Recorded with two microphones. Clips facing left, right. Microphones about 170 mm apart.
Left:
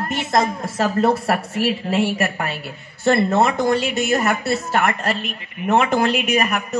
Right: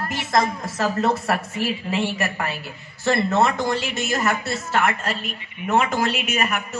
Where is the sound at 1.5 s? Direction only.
65° left (ahead or behind).